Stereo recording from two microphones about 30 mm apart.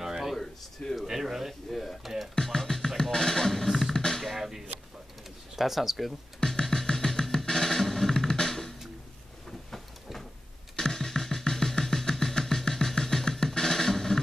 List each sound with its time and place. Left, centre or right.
0.0 s a sound: centre
1.0 s speech: centre
1.7 s a sound: centre
2.4 s music: centre
3.6 s music: centre
3.9 s music: centre
4.4 s a sound: centre
5.6 s speech: centre
6.9 s music: left
8.3 s drum: centre
10.8 s music: centre